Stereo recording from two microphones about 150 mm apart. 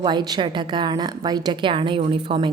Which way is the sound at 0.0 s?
30° right (ahead or behind).